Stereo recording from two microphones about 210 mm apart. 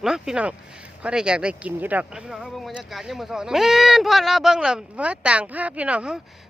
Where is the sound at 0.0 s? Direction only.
Centre (ahead or behind).